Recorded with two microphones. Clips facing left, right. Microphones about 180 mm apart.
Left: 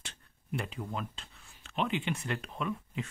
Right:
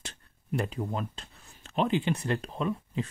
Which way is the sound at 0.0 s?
40° right (ahead or behind).